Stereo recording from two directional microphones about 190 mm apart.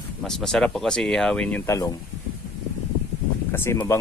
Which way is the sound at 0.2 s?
Centre (ahead or behind).